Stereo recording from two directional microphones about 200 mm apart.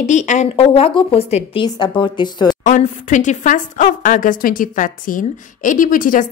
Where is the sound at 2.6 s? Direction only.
40° left (ahead or behind).